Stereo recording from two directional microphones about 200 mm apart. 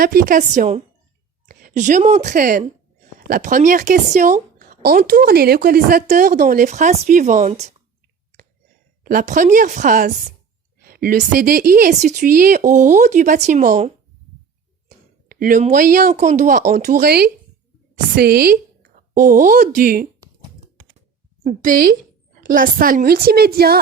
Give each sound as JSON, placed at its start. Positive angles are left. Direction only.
{"t": 0.0, "sound": "a woman's voice", "side_deg": -45}
{"t": 9.0, "sound": "speech", "side_deg": -40}
{"t": 14.8, "sound": "a woman's voice", "side_deg": -45}
{"t": 21.4, "sound": "speech", "side_deg": -40}